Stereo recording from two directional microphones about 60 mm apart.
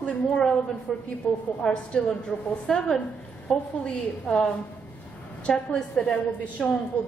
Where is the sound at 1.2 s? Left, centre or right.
Centre.